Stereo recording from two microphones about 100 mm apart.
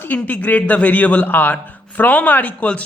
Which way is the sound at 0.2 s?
15° left (ahead or behind).